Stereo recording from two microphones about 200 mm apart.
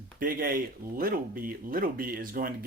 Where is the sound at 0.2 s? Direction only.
45° right (ahead or behind).